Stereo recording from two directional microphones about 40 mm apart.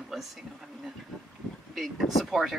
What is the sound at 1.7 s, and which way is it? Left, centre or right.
Speech, centre.